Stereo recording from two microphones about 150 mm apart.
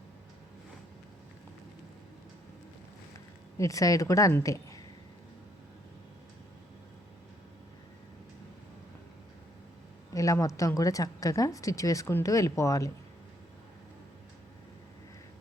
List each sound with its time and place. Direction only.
3.6 s a woman's voice: 20° left (ahead or behind)
10.1 s a woman's voice: 20° left (ahead or behind)